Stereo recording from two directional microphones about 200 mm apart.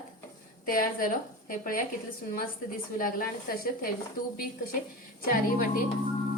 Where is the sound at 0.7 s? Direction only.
45° left (ahead or behind).